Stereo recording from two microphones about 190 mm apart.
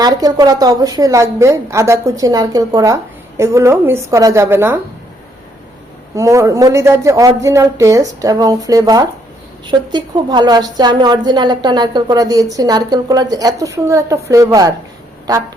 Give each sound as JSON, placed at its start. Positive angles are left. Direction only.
{"t": 0.0, "sound": "a woman's voice", "side_deg": -20}
{"t": 6.1, "sound": "a woman's voice", "side_deg": -15}